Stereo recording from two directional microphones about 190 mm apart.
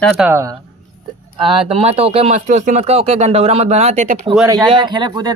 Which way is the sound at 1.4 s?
25° right (ahead or behind).